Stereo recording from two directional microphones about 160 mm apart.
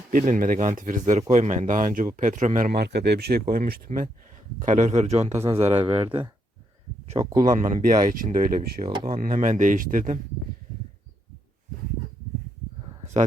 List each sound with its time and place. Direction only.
0.1 s speech: 55° right (ahead or behind)
2.7 s speech: 90° right
3.5 s a man's voice: 60° right (ahead or behind); by 6.1 s 35° right (ahead or behind)
7.4 s speech: 55° right (ahead or behind)